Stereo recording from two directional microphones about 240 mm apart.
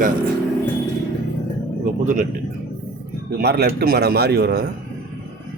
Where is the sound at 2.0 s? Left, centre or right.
Right.